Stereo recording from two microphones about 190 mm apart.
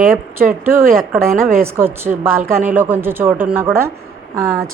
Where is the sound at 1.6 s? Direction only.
10° right (ahead or behind).